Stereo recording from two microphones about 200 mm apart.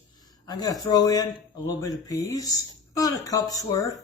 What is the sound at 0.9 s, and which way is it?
Speech, 20° left (ahead or behind).